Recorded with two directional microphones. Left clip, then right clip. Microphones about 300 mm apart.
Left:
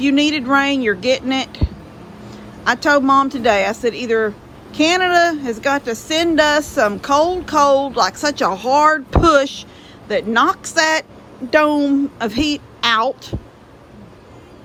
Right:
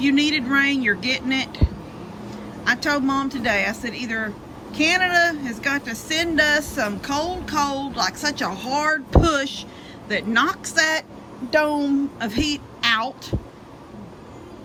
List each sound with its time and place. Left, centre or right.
0.0 s speech: centre